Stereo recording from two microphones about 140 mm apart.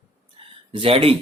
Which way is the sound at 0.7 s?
40° right (ahead or behind).